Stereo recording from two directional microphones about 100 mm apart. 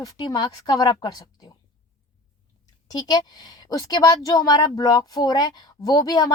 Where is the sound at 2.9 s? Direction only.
40° left (ahead or behind).